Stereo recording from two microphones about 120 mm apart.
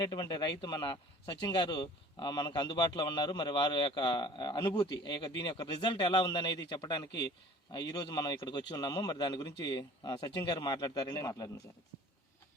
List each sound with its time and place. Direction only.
0.0 s a man's voice: 35° left (ahead or behind)